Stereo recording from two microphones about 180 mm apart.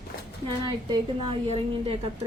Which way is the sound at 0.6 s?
25° right (ahead or behind).